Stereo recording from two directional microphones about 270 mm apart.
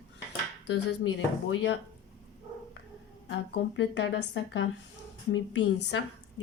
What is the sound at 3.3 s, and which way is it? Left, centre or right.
Speech, left.